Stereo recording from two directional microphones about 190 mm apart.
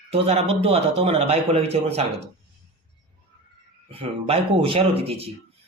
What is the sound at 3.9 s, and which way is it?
A man's voice, 30° right (ahead or behind).